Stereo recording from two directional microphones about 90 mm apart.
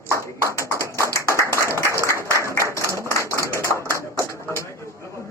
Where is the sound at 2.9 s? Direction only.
35° left (ahead or behind).